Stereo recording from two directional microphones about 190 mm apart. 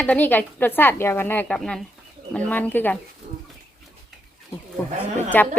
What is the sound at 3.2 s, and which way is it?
Bird, 35° right (ahead or behind).